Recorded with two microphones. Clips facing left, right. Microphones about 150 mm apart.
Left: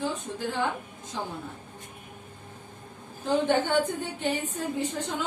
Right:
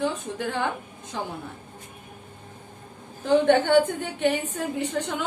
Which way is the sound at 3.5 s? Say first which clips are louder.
Right 7 dB; 65° right (ahead or behind).